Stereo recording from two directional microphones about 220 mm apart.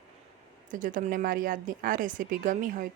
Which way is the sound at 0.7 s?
35° right (ahead or behind).